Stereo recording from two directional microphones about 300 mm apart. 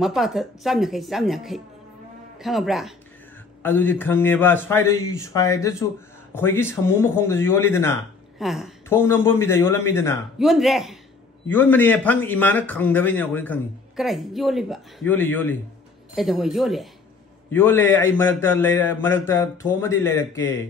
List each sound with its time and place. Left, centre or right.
0.0 s a man's voice: centre